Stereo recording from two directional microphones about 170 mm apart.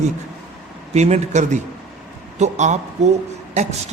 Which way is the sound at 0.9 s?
40° right (ahead or behind).